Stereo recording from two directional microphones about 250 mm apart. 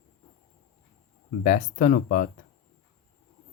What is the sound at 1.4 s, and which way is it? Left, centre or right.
Speech, left.